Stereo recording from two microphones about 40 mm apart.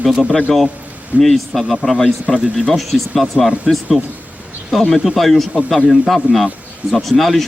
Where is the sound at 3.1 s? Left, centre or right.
Centre.